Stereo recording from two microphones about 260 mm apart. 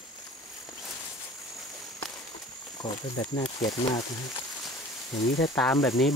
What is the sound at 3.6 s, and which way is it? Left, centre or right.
Speech, centre.